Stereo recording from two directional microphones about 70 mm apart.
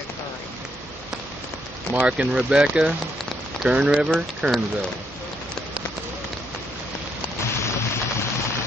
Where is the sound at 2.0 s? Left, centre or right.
Centre.